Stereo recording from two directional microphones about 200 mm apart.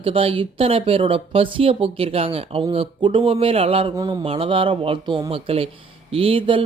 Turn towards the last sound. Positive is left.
turn(degrees=-30)  # may be behind; listen again after turning